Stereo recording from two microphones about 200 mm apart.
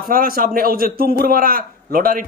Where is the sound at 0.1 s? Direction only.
45° right (ahead or behind).